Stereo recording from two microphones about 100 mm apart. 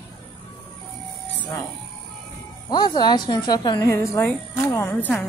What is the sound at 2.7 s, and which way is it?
A woman's voice, 45° left (ahead or behind).